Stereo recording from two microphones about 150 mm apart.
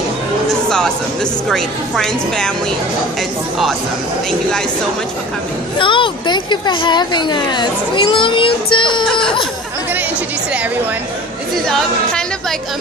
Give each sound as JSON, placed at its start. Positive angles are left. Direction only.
{"t": 0.7, "sound": "music", "side_deg": 5}
{"t": 1.5, "sound": "a woman's voice", "side_deg": 5}
{"t": 4.3, "sound": "a woman's voice", "side_deg": 5}
{"t": 5.8, "sound": "speech", "side_deg": 35}
{"t": 11.6, "sound": "speech", "side_deg": 5}